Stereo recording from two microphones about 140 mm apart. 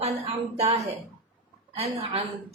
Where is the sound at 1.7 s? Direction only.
45° right (ahead or behind).